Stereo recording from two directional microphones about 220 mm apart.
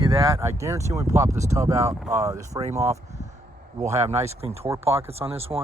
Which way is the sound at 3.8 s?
30° right (ahead or behind).